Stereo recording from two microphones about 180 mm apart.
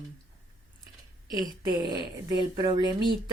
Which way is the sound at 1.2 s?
20° right (ahead or behind).